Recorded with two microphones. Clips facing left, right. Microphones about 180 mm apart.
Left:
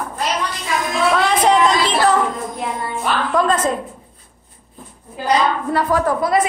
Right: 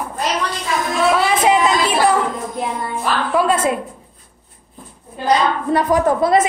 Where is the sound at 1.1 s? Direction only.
5° right (ahead or behind).